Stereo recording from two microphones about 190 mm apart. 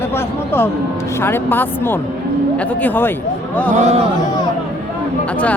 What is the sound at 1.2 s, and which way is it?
Speech, 10° left (ahead or behind).